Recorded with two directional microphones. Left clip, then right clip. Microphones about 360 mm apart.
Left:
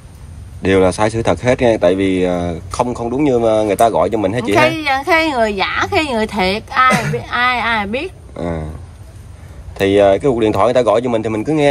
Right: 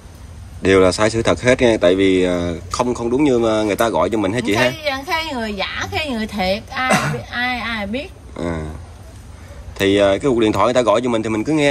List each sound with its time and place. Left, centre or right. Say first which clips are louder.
0.6 s speech: even; centre
9.8 s speech: left 3 dB; centre